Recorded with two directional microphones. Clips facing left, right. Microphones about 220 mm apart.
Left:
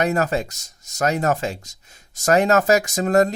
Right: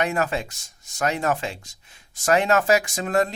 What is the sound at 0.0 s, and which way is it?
Speech, 40° left (ahead or behind).